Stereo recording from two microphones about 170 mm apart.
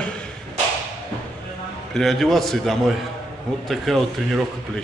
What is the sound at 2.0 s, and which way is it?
Speech, centre (ahead or behind).